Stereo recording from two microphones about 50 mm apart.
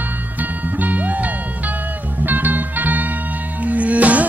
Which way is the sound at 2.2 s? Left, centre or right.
Right.